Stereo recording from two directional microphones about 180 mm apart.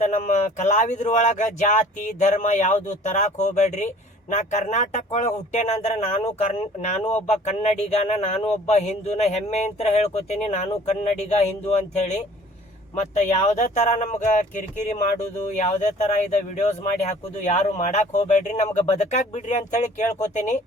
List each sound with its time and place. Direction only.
0.0 s speech: 40° left (ahead or behind)